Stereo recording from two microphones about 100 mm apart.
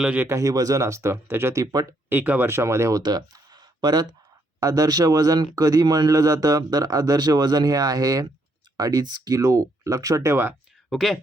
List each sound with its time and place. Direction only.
0.0 s speech: 15° right (ahead or behind)
0.3 s speech: 30° right (ahead or behind)
1.6 s speech: 35° right (ahead or behind)
2.0 s speech: 15° right (ahead or behind)
3.0 s a sound: 45° right (ahead or behind)
4.6 s speech: 40° right (ahead or behind)
10.8 s speech: centre (ahead or behind)